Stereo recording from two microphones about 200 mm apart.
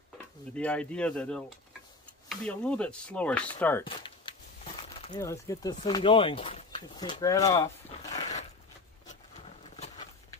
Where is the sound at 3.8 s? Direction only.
25° left (ahead or behind).